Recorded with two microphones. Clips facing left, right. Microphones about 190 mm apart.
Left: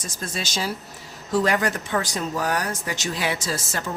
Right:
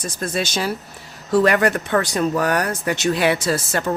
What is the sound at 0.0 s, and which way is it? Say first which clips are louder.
Speech: right 7 dB; 55° right (ahead or behind).